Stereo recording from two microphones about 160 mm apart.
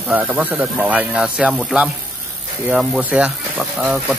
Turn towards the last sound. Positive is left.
turn(degrees=-5)  # may be behind; listen again after turning